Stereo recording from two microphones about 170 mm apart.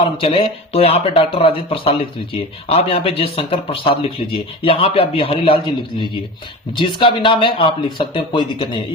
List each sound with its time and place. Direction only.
0.2 s speech: 35° left (ahead or behind)